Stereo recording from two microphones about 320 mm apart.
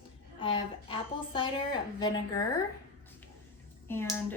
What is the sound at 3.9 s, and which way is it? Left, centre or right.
Speech, centre.